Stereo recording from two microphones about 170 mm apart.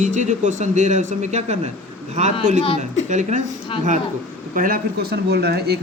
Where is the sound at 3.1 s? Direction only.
45° right (ahead or behind).